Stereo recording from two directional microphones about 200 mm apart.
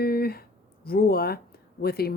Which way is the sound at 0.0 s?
50° left (ahead or behind).